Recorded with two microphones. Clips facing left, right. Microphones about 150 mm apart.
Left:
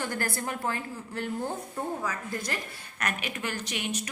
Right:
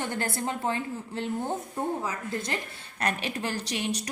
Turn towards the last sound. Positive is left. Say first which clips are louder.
# right 3 dB
turn(degrees=-35)  # may be behind; listen again after turning